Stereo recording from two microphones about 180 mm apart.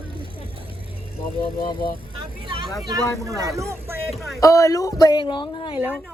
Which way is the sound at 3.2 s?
15° right (ahead or behind).